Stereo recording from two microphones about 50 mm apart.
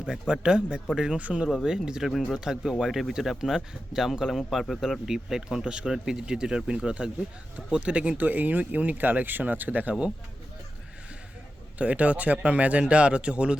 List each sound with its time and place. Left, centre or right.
0.0 s speech: centre
2.0 s speech: centre
4.7 s speech: centre
5.0 s speech: centre; by 9.9 s right
11.8 s speech: right